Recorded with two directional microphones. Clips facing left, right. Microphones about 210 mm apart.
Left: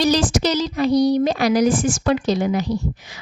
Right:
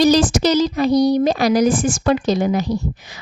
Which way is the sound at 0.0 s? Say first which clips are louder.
Right 4 dB; 40° right (ahead or behind).